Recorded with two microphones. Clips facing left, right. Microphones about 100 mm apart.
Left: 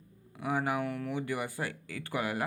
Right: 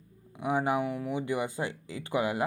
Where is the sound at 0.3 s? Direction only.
20° right (ahead or behind).